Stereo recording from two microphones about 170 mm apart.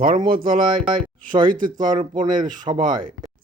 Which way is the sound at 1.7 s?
25° right (ahead or behind).